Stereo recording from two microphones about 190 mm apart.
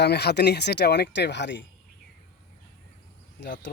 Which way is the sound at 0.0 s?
60° left (ahead or behind).